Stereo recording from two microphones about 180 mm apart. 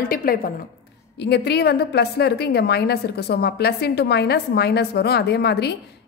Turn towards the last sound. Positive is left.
turn(degrees=65)  # may be behind; listen again after turning